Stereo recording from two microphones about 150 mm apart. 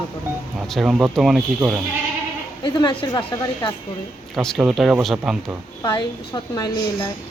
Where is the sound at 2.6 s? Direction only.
30° left (ahead or behind).